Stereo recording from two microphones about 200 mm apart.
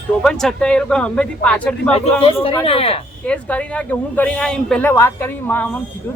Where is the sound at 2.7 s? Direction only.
30° left (ahead or behind).